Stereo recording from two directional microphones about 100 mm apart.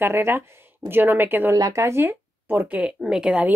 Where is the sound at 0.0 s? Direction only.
25° right (ahead or behind); by 3.4 s 10° right (ahead or behind).